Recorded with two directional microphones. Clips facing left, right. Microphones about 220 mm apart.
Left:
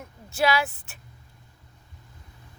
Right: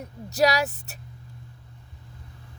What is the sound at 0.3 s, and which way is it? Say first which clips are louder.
Speech: right 2 dB; 40° right (ahead or behind).